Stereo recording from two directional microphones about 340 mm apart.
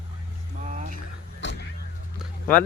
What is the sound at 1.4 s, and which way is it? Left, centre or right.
Vehicle, left.